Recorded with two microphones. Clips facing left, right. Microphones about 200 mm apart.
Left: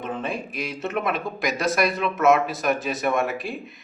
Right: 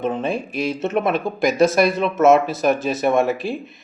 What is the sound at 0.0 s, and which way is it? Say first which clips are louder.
Speech: right 7 dB; 25° right (ahead or behind).